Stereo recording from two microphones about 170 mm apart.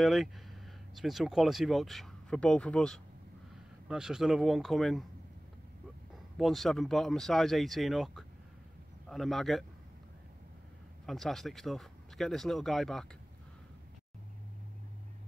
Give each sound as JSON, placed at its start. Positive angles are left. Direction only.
{"t": 0.0, "sound": "speech", "side_deg": 0}
{"t": 6.3, "sound": "speech", "side_deg": 0}
{"t": 11.1, "sound": "speech", "side_deg": 0}